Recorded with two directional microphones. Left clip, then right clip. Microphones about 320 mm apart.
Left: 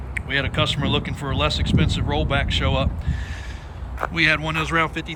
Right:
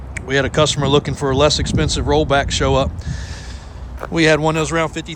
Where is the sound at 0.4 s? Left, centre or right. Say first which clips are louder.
Right 7 dB; right.